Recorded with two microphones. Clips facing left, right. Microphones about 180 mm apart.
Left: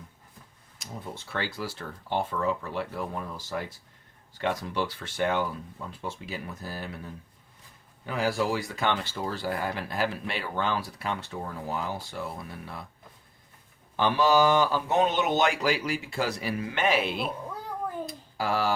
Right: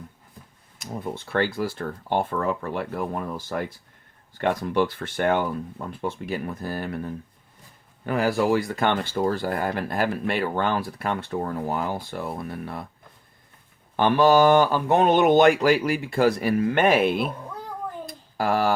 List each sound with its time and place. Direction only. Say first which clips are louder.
0.8 s speech: right 8 dB; 55° right (ahead or behind)
13.9 s speech: right 5 dB; 55° right (ahead or behind)
18.0 s a sound: right 5 dB; 55° right (ahead or behind)